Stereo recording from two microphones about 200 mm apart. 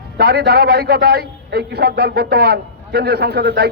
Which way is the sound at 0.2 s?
55° right (ahead or behind).